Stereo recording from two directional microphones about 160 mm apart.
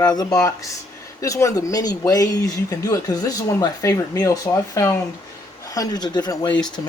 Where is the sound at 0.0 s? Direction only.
25° left (ahead or behind).